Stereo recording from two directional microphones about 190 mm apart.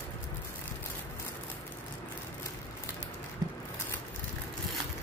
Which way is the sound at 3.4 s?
20° right (ahead or behind).